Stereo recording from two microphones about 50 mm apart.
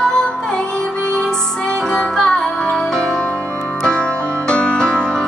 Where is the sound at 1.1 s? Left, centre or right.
Centre.